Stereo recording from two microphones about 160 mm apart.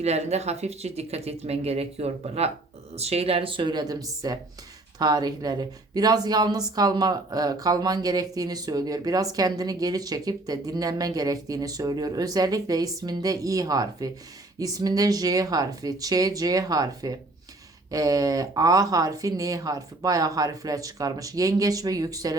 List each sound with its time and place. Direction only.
0.0 s speech: 40° right (ahead or behind); by 22.4 s 20° right (ahead or behind)